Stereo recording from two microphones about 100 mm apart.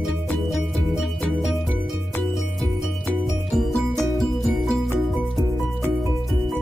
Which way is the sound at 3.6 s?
Centre (ahead or behind).